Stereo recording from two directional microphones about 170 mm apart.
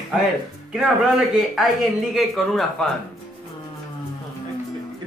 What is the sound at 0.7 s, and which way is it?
A man's voice, 5° right (ahead or behind).